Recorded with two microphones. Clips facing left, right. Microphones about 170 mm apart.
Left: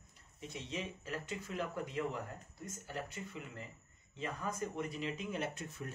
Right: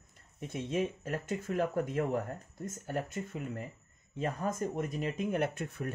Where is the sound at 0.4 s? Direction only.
50° right (ahead or behind).